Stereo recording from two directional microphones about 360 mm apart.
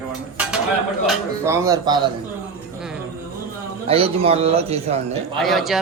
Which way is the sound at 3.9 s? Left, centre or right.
Centre.